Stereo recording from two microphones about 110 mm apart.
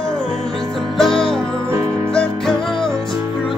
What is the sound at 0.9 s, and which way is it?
Music, 5° left (ahead or behind).